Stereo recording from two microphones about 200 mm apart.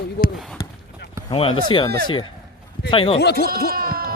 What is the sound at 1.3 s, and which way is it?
Speech, 25° left (ahead or behind).